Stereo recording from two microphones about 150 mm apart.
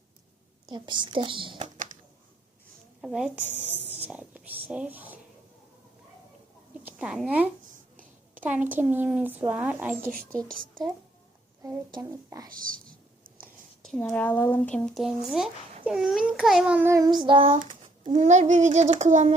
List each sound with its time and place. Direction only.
0.7 s a woman's voice: 30° right (ahead or behind)
3.0 s a child's voice: 5° right (ahead or behind)
3.8 s a sound: 10° right (ahead or behind)
6.8 s a woman's voice: 5° right (ahead or behind)
11.6 s a woman's voice: 25° right (ahead or behind)
12.5 s speech: 65° right (ahead or behind)
14.0 s a child's voice: 10° left (ahead or behind); by 16.9 s 10° right (ahead or behind)
16.9 s a woman's voice: 25° right (ahead or behind)
17.2 s a woman's voice: 35° right (ahead or behind)
17.6 s a child's voice: 60° right (ahead or behind)